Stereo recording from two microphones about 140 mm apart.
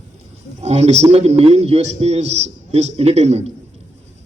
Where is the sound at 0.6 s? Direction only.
50° right (ahead or behind).